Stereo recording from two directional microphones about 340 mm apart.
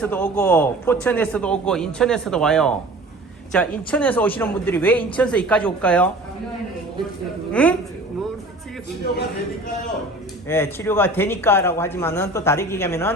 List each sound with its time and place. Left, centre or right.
0.0 s a man's voice: centre
7.5 s a woman's voice: centre
10.5 s a man's voice: centre